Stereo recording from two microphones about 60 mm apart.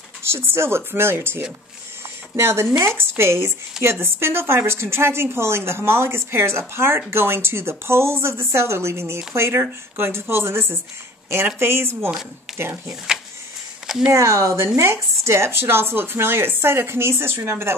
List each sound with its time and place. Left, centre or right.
0.2 s a woman's voice: right
13.8 s speech: centre
14.1 s a woman's voice: right